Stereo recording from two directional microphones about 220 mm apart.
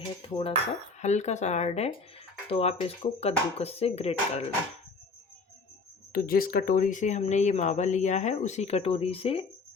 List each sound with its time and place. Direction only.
0.3 s speech: 25° left (ahead or behind)
6.1 s speech: 40° left (ahead or behind); by 9.5 s 25° left (ahead or behind)